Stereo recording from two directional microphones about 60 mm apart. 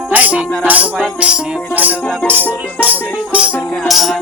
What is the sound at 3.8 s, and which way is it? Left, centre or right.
Music, centre.